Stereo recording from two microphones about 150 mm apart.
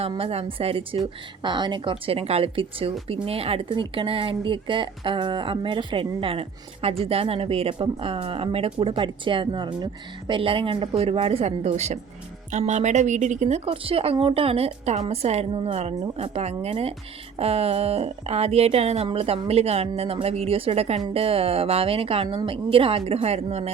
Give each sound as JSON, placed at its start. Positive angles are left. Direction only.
{"t": 0.0, "sound": "speech", "side_deg": -40}
{"t": 13.7, "sound": "speech", "side_deg": -40}